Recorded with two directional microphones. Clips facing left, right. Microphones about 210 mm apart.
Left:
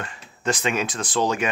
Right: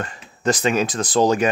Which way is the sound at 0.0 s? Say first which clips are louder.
Right 5 dB; 40° right (ahead or behind).